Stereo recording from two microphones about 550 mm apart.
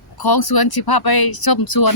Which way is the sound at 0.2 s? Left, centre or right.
Left.